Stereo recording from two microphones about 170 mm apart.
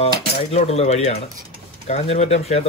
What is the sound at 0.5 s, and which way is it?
Speech, 40° left (ahead or behind).